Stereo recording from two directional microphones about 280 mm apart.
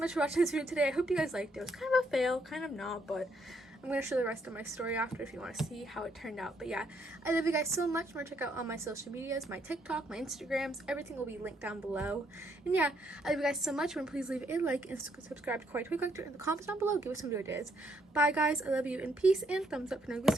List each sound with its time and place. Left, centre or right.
0.0 s a woman's voice: centre